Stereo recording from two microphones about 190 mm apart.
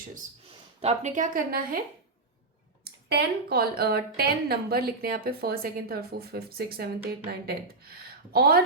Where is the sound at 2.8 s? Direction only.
55° right (ahead or behind).